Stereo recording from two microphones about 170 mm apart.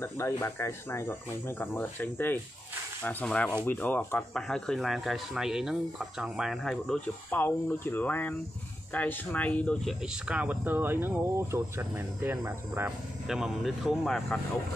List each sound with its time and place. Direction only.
0.0 s speech: 15° left (ahead or behind)
10.2 s speech: 5° right (ahead or behind)
13.3 s speech: centre (ahead or behind)